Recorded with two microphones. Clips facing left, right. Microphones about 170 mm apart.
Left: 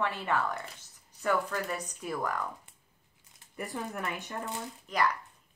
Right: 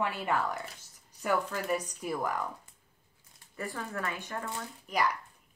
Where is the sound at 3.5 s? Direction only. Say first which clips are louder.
Even; 20° left (ahead or behind).